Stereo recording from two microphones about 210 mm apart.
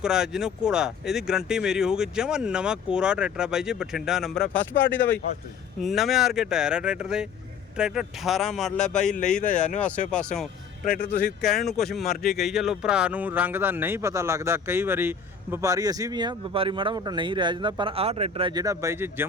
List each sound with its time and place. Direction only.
0.0 s speech: 5° right (ahead or behind)
4.8 s speech: 60° left (ahead or behind)
5.8 s speech: centre (ahead or behind)
9.4 s speech: 40° left (ahead or behind)
10.1 s speech: 5° left (ahead or behind)
10.8 s speech: 40° left (ahead or behind)
11.4 s speech: centre (ahead or behind)